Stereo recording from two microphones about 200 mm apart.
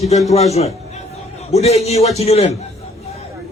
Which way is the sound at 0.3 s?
30° left (ahead or behind).